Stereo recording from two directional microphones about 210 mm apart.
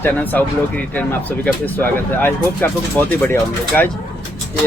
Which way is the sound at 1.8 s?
10° left (ahead or behind).